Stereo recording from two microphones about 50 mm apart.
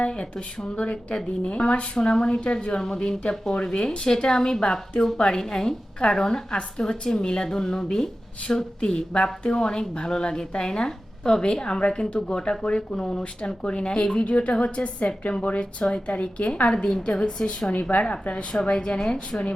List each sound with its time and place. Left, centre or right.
0.0 s a woman's voice: centre
17.7 s a woman's voice: left